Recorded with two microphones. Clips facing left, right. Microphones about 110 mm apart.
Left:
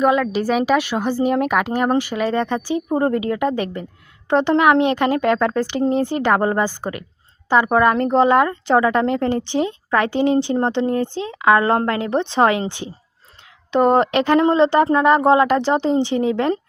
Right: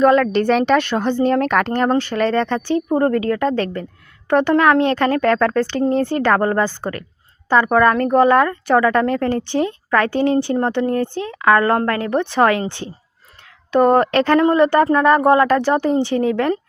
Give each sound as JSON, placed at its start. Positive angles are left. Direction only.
{"t": 0.0, "sound": "speech", "side_deg": 10}